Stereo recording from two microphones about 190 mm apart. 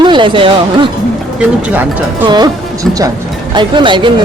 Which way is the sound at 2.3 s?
20° right (ahead or behind).